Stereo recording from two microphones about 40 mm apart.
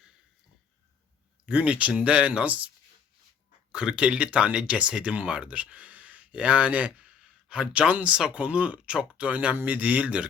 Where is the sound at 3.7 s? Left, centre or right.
Right.